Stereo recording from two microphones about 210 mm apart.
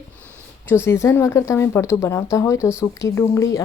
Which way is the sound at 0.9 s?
15° left (ahead or behind).